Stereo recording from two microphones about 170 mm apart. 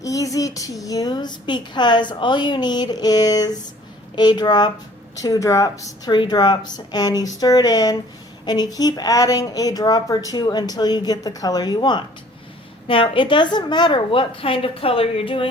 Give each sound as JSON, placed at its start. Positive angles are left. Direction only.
{"t": 0.0, "sound": "a woman's voice", "side_deg": 20}